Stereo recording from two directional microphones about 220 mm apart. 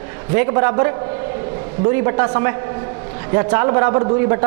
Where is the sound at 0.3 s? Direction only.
15° right (ahead or behind).